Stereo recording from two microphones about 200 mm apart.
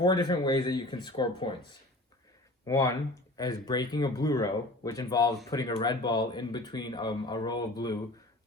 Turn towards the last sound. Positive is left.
turn(degrees=20)  # may be behind; listen again after turning